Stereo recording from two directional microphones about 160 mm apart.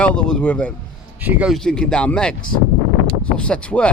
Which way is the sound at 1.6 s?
5° left (ahead or behind).